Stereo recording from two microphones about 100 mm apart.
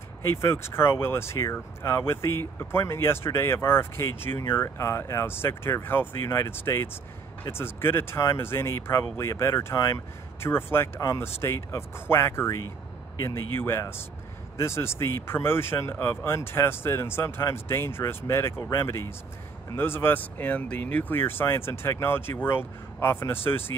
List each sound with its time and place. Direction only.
0.4 s speech: 25° left (ahead or behind)